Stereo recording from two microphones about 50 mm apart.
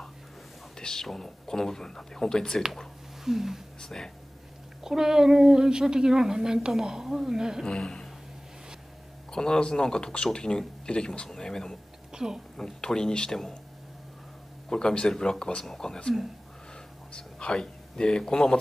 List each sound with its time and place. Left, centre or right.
0.7 s speech: centre
3.3 s a woman's voice: centre
3.8 s speech: centre
4.8 s a woman's voice: centre
7.6 s speech: centre
9.3 s speech: centre
12.1 s speech: centre
12.5 s speech: centre
14.7 s speech: centre
17.1 s a man's voice: centre